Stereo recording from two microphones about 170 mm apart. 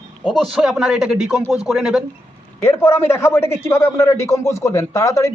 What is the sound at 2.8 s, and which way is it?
A man's voice, 15° left (ahead or behind).